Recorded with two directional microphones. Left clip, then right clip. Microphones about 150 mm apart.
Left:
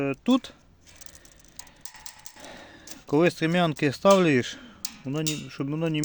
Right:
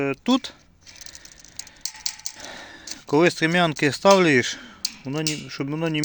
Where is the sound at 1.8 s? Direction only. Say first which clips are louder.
Right 15 dB; 15° left (ahead or behind).